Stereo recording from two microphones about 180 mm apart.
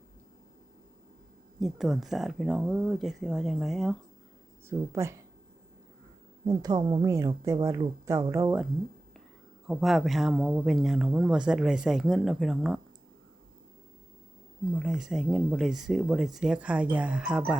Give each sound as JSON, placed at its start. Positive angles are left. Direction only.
{"t": 1.5, "sound": "speech", "side_deg": 0}
{"t": 4.7, "sound": "speech", "side_deg": -15}
{"t": 6.4, "sound": "speech", "side_deg": -20}
{"t": 9.6, "sound": "speech", "side_deg": 0}
{"t": 14.7, "sound": "speech", "side_deg": 0}